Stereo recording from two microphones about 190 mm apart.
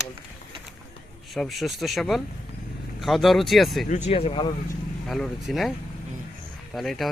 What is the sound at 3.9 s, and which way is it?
Speech, 35° left (ahead or behind).